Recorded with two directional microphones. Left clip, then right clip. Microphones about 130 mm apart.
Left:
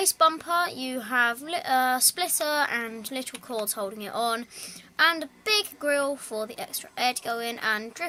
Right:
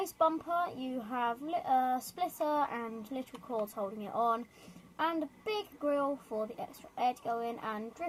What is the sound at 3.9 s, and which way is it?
Speech, 35° left (ahead or behind).